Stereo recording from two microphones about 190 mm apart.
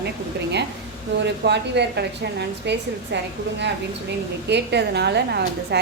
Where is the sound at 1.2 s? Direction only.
65° right (ahead or behind).